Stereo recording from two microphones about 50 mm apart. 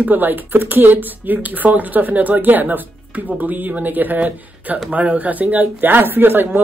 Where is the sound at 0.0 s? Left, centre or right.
Right.